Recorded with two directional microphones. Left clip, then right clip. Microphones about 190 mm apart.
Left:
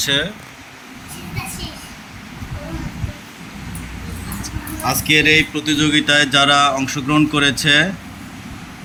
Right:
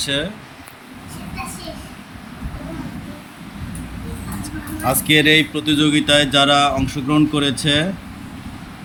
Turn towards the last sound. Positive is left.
turn(degrees=-5)  # may be behind; listen again after turning